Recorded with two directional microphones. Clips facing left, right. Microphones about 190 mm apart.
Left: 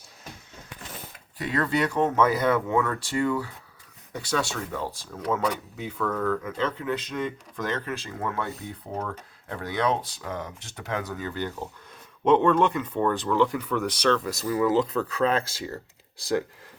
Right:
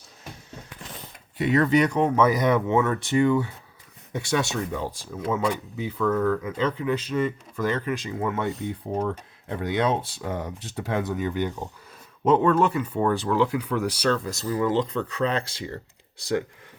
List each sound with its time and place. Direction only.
1.4 s speech: 20° right (ahead or behind)
12.2 s speech: 5° right (ahead or behind)
14.4 s speech: 5° left (ahead or behind)
15.7 s computer keyboard: centre (ahead or behind)